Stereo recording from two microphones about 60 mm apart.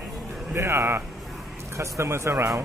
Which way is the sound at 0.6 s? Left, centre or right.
Right.